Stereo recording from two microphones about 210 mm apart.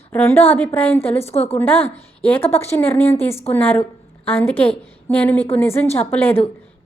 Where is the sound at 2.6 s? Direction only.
10° left (ahead or behind).